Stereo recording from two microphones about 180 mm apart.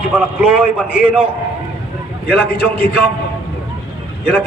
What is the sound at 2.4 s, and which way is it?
Speech, 65° left (ahead or behind).